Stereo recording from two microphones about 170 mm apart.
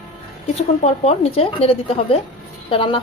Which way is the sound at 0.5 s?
40° left (ahead or behind).